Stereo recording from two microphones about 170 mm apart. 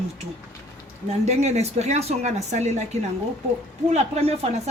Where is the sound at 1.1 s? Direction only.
40° right (ahead or behind).